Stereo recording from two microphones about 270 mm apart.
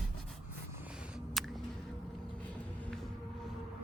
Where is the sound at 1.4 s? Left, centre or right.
Centre.